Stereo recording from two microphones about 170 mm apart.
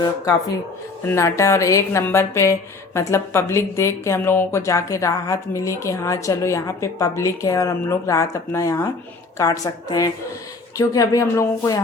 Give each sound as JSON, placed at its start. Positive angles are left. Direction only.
{"t": 0.0, "sound": "a woman's voice", "side_deg": 20}